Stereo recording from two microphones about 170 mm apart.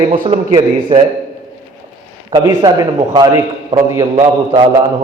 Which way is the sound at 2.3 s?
25° right (ahead or behind).